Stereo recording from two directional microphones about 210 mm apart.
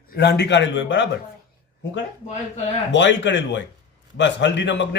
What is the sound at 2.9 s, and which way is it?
A man's voice, 60° left (ahead or behind).